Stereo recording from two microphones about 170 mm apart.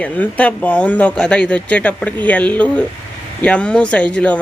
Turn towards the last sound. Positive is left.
turn(degrees=5)  # may be behind; listen again after turning